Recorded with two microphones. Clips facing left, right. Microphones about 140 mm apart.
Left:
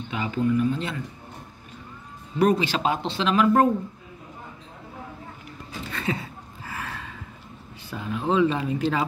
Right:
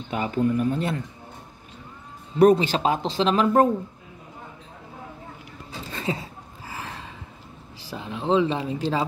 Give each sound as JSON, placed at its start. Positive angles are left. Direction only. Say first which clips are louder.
{"t": 0.1, "sound": "speech", "louder": "right 1 dB", "side_deg": -45}
{"t": 2.4, "sound": "speech", "louder": "right 4 dB", "side_deg": -45}
{"t": 5.9, "sound": "a sound", "louder": "even", "side_deg": -30}
{"t": 6.7, "sound": "gasp", "louder": "left 1 dB", "side_deg": -25}
{"t": 7.9, "sound": "speech", "louder": "right 2 dB", "side_deg": -25}